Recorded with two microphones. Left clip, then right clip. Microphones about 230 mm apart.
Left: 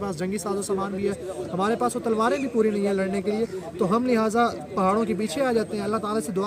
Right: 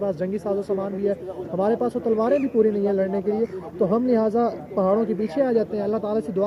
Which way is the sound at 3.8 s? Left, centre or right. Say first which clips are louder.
Right 2 dB; left.